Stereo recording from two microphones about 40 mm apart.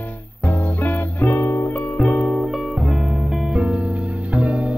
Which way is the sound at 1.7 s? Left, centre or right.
Left.